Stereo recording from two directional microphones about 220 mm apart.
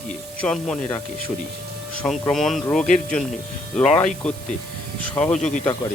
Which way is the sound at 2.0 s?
Centre (ahead or behind).